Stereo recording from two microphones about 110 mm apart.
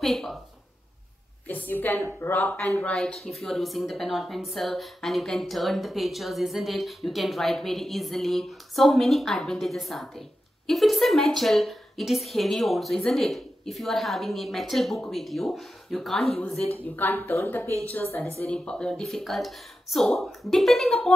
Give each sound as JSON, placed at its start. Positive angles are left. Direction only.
{"t": 0.0, "sound": "a woman's voice", "side_deg": 0}
{"t": 1.5, "sound": "a woman's voice", "side_deg": 15}
{"t": 16.7, "sound": "a woman's voice", "side_deg": 15}